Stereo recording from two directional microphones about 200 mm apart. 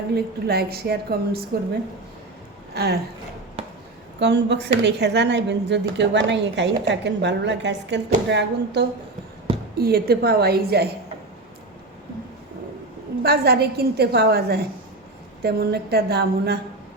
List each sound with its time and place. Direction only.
0.1 s a woman's voice: 55° right (ahead or behind)
2.8 s a woman's voice: 55° right (ahead or behind)
4.2 s a woman's voice: 60° right (ahead or behind)
13.2 s a woman's voice: 50° right (ahead or behind)